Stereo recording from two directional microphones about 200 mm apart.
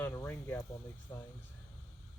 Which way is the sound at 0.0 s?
10° left (ahead or behind).